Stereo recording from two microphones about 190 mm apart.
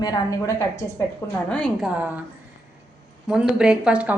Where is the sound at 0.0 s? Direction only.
20° left (ahead or behind).